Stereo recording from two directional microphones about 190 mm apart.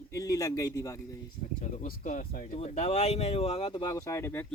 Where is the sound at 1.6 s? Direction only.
45° left (ahead or behind).